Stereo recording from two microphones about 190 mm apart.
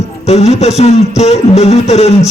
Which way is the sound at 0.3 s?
35° left (ahead or behind).